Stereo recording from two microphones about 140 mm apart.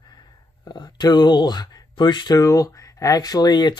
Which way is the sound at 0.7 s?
30° left (ahead or behind).